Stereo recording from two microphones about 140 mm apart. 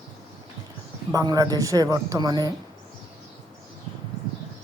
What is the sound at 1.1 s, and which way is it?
A woman's voice, 25° right (ahead or behind).